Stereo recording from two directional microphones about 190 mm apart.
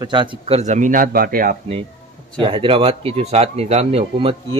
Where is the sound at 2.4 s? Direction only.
30° right (ahead or behind).